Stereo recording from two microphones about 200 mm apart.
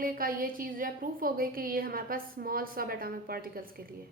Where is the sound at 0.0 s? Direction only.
45° right (ahead or behind).